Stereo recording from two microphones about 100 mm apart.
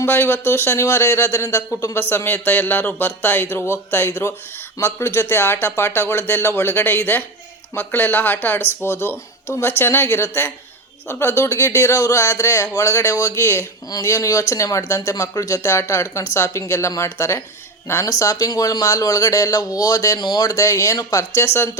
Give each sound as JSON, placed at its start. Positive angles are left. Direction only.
{"t": 0.0, "sound": "speech", "side_deg": 25}